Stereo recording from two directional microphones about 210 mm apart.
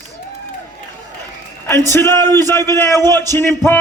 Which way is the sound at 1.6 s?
15° left (ahead or behind).